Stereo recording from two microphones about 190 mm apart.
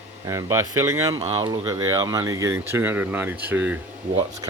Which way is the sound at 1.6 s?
15° right (ahead or behind).